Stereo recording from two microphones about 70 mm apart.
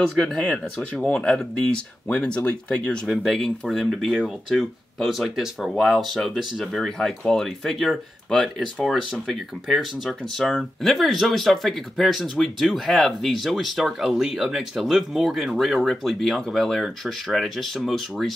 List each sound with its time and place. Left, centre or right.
0.2 s speech: centre
3.1 s speech: centre